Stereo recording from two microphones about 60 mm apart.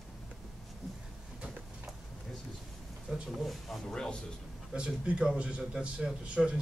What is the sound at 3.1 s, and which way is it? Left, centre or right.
Speech, centre.